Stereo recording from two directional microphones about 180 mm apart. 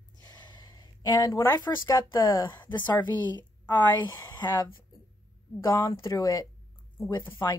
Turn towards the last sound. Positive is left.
turn(degrees=15)  # may be behind; listen again after turning